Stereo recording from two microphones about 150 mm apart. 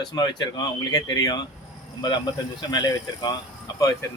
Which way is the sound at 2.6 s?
30° left (ahead or behind).